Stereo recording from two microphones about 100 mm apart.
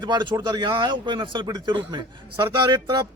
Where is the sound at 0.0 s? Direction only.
50° right (ahead or behind).